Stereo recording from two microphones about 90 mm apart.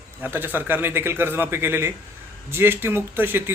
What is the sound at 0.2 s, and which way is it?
A man's voice, 20° right (ahead or behind).